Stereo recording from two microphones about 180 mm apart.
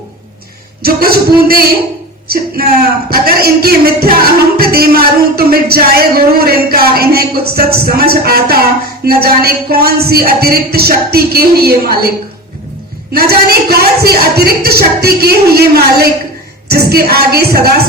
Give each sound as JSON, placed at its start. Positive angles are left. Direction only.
{"t": 0.8, "sound": "music", "side_deg": -55}
{"t": 2.2, "sound": "a sound", "side_deg": -55}
{"t": 3.1, "sound": "music", "side_deg": -55}
{"t": 13.1, "sound": "music", "side_deg": -60}